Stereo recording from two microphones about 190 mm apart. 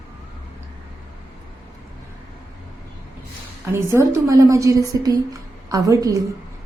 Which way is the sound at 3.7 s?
15° right (ahead or behind).